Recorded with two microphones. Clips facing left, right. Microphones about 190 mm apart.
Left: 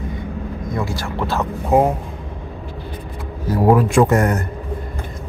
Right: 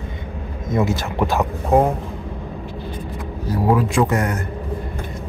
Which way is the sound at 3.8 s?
50° left (ahead or behind).